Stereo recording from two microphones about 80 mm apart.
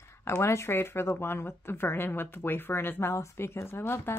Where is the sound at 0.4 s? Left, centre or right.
Left.